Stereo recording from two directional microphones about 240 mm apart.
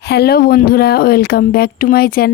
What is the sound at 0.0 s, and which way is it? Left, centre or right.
Speech, left.